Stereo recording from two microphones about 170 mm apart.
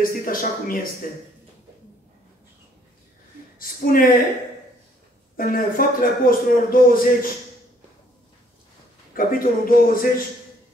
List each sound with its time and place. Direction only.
0.0 s a man's voice: 55° left (ahead or behind)
3.5 s speech: 55° left (ahead or behind)
5.4 s a man's voice: 55° left (ahead or behind)
9.1 s a man's voice: 55° left (ahead or behind)